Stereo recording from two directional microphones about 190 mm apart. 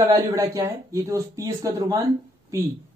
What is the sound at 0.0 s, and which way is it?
Speech, 20° right (ahead or behind).